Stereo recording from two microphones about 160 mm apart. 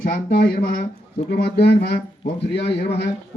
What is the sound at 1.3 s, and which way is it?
Speech, 90° left.